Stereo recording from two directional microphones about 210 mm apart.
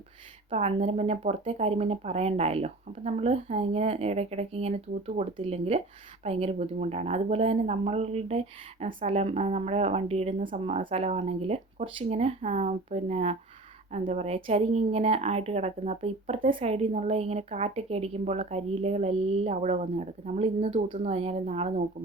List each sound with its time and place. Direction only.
0.5 s speech: 30° right (ahead or behind)